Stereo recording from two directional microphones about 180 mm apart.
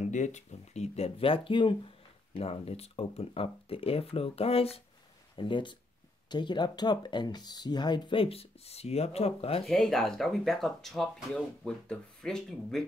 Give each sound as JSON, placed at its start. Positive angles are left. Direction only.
{"t": 0.0, "sound": "speech", "side_deg": 40}
{"t": 9.7, "sound": "speech", "side_deg": 0}